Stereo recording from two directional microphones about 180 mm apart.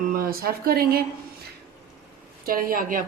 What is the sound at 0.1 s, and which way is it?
Speech, 55° right (ahead or behind).